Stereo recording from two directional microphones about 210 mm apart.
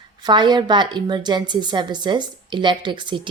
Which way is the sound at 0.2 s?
20° right (ahead or behind).